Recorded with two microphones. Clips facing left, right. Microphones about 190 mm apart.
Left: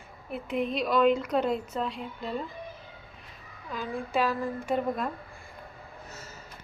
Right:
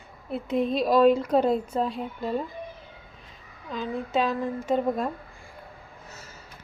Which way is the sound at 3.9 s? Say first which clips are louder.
Right 2 dB; 20° right (ahead or behind).